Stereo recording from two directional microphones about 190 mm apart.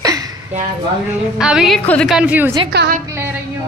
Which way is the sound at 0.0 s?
20° right (ahead or behind).